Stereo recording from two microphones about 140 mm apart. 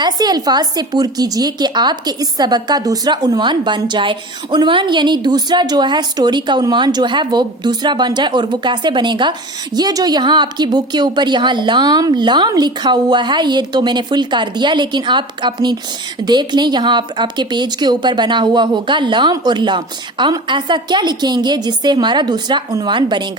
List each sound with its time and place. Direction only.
0.0 s a woman's voice: 30° right (ahead or behind)